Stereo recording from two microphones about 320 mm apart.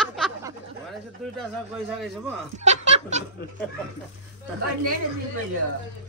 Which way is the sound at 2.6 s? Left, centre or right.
Right.